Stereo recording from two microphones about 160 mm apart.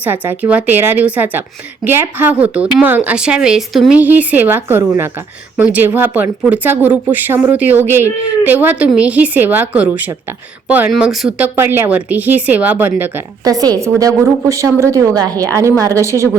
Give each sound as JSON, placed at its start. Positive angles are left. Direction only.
{"t": 0.0, "sound": "speech", "side_deg": -10}
{"t": 13.4, "sound": "a woman's voice", "side_deg": -25}